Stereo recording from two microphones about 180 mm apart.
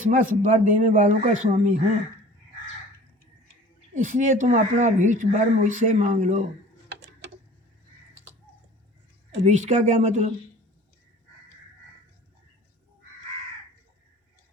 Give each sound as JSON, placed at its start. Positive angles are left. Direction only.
{"t": 0.1, "sound": "speech", "side_deg": -45}
{"t": 3.9, "sound": "speech", "side_deg": -45}
{"t": 6.8, "sound": "a sound", "side_deg": -75}
{"t": 9.4, "sound": "speech", "side_deg": -40}